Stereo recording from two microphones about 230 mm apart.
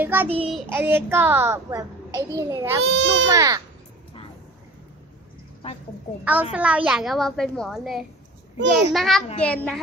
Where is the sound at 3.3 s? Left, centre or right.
Centre.